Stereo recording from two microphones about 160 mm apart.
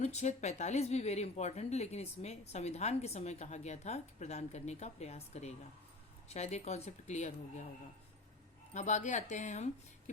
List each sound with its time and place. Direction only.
0.0 s speech: 45° left (ahead or behind)
8.7 s speech: 50° left (ahead or behind)